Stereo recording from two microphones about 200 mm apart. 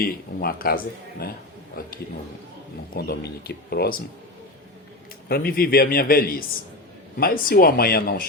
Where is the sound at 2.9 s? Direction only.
50° left (ahead or behind).